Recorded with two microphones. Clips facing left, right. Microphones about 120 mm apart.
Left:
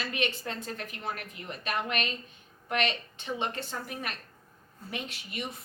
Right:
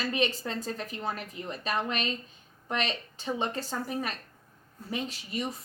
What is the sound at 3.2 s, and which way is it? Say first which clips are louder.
A woman's voice: right 2 dB; 35° right (ahead or behind).